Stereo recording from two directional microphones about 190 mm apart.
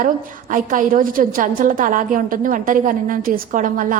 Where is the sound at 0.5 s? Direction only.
45° right (ahead or behind).